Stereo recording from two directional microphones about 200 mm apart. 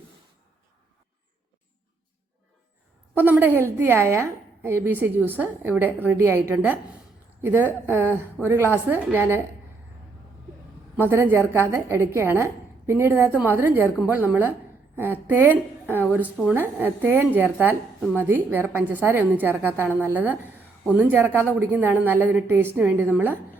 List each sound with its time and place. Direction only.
3.2 s a woman's voice: 10° right (ahead or behind)
11.1 s a woman's voice: 10° right (ahead or behind)